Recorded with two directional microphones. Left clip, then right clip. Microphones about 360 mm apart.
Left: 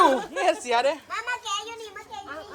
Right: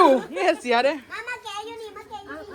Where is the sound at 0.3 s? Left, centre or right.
Centre.